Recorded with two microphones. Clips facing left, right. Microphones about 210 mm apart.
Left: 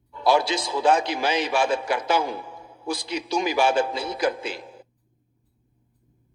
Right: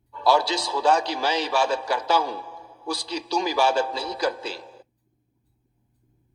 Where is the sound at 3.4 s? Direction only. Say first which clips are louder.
Left 1 dB; 15° left (ahead or behind).